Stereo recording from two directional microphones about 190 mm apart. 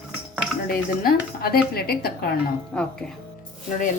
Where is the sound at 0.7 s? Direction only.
50° left (ahead or behind).